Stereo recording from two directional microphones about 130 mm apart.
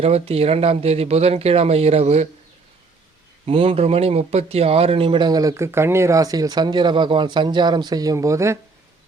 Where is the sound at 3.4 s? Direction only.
45° right (ahead or behind).